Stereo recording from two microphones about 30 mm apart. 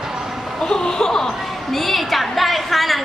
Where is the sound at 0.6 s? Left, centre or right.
Left.